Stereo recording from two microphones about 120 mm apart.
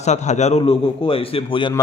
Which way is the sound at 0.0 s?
75° left (ahead or behind).